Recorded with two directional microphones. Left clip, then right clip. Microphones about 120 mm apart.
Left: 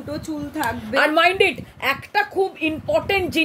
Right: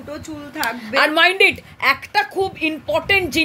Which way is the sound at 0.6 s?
50° left (ahead or behind).